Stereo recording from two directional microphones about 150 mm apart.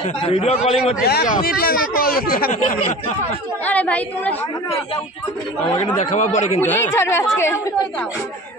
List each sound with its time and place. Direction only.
0.3 s a man's voice: 45° left (ahead or behind)
1.0 s speech: 90° left
3.6 s a woman's voice: 10° left (ahead or behind)
5.9 s a man's voice: 50° left (ahead or behind)
6.6 s a woman's voice: 15° left (ahead or behind)